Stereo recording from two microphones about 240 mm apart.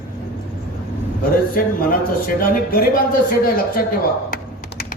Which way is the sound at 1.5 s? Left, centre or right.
Left.